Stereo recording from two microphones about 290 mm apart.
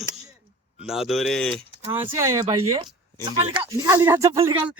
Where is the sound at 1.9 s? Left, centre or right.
Centre.